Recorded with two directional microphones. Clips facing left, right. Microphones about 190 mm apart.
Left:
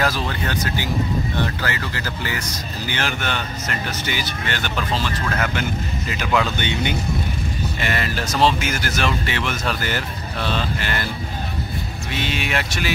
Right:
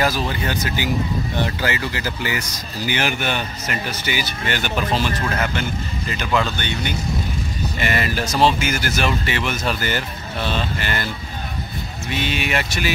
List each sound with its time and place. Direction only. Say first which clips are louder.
0.0 s speech: right 2 dB; 10° right (ahead or behind)
5.4 s speech: even; 5° left (ahead or behind)
6.6 s speech: left 2 dB; 15° left (ahead or behind)
7.8 s speech: right 3 dB; 5° right (ahead or behind)
12.2 s speech: right 1 dB; centre (ahead or behind)